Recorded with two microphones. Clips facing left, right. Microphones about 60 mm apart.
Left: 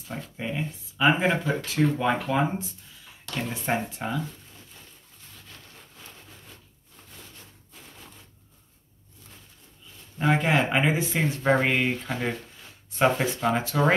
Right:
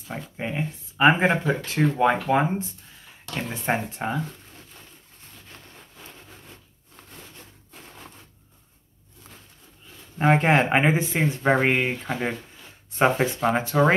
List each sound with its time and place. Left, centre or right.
0.1 s speech: right
3.7 s speech: right
10.1 s speech: right; by 12.4 s centre
12.9 s speech: right